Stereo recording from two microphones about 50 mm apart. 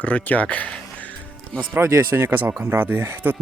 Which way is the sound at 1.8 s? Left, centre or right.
Right.